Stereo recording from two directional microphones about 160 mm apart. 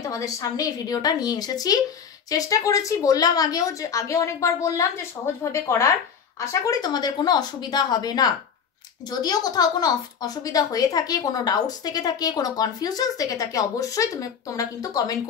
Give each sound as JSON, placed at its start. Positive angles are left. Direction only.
{"t": 0.1, "sound": "a woman's voice", "side_deg": 20}